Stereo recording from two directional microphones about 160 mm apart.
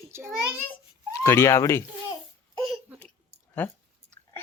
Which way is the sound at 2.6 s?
Centre (ahead or behind).